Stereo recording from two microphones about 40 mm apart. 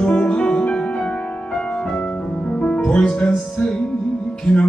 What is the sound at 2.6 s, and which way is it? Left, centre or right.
Music, left.